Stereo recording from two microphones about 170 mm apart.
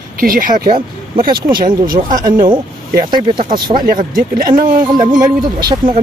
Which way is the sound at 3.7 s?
55° right (ahead or behind).